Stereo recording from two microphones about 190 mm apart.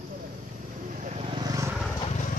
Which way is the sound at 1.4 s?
15° right (ahead or behind).